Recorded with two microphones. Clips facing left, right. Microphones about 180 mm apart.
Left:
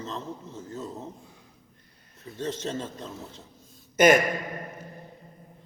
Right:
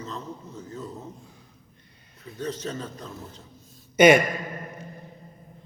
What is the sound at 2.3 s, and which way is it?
A man's voice, 25° left (ahead or behind).